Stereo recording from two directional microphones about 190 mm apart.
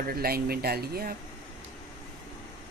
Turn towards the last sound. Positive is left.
turn(degrees=-55)  # may be behind; listen again after turning